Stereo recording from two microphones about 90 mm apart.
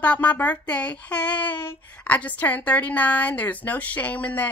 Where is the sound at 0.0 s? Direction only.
15° left (ahead or behind).